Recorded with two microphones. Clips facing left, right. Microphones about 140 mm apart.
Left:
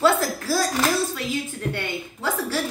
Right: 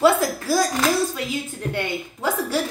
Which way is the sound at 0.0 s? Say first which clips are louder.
Right 2 dB; 15° right (ahead or behind).